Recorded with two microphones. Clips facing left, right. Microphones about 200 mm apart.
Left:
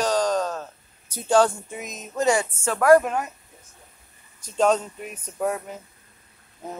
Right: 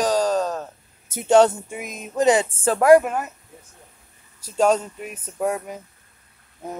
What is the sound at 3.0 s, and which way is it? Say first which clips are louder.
Speech: right 1 dB; 5° right (ahead or behind).